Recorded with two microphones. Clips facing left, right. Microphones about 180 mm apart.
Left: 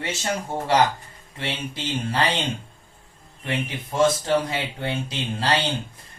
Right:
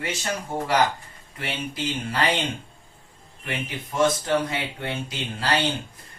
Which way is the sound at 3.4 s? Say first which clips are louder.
Left 3 dB; 30° left (ahead or behind).